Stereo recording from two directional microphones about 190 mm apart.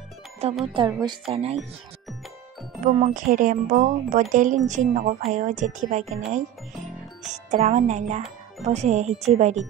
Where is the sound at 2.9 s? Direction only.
40° right (ahead or behind).